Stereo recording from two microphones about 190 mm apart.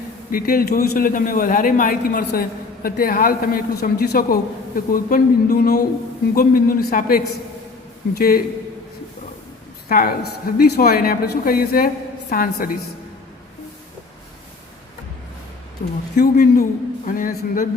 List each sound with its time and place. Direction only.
0.3 s a man's voice: 50° left (ahead or behind)
9.9 s a man's voice: 50° left (ahead or behind)
15.8 s a man's voice: 40° left (ahead or behind)